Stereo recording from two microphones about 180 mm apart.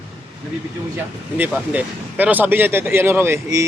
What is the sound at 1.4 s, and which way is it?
Speech, 10° right (ahead or behind).